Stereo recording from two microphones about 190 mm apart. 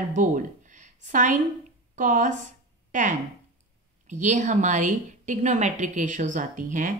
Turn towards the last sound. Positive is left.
turn(degrees=-45)  # may be behind; listen again after turning